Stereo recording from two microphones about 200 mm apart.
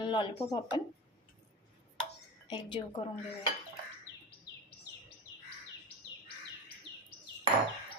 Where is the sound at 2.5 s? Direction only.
20° left (ahead or behind).